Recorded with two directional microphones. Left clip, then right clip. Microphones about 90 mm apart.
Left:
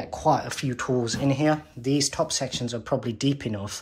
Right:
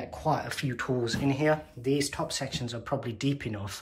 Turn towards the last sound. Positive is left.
turn(degrees=30)  # may be behind; listen again after turning